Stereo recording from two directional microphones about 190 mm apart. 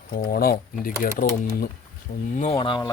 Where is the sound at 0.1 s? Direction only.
50° left (ahead or behind); by 2.9 s 25° left (ahead or behind).